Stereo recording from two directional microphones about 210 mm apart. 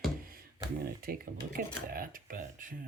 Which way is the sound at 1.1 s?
45° right (ahead or behind).